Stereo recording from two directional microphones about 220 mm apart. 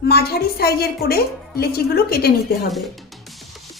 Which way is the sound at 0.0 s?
45° left (ahead or behind).